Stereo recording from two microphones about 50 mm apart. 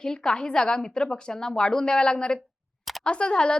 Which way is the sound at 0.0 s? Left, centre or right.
Centre.